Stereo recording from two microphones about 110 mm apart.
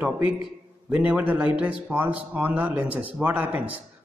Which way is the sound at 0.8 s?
10° right (ahead or behind).